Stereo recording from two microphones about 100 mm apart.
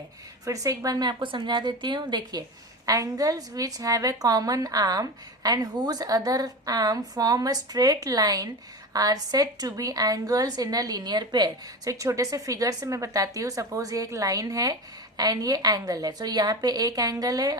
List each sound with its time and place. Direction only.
0.4 s a woman's voice: 35° right (ahead or behind)
2.8 s a woman's voice: 35° right (ahead or behind)
11.9 s a woman's voice: 35° right (ahead or behind)